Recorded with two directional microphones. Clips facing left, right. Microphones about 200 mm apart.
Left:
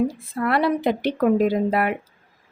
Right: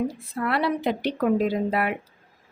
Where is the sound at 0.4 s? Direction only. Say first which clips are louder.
Left 4 dB; 50° left (ahead or behind).